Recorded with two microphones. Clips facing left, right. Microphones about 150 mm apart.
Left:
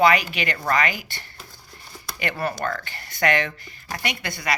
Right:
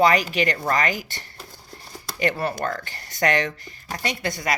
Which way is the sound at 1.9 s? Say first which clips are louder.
Right 5 dB; 35° right (ahead or behind).